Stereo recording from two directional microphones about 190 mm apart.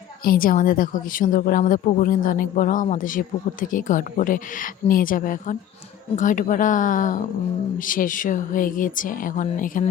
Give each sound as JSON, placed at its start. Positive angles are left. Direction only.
{"t": 0.3, "sound": "speech", "side_deg": 50}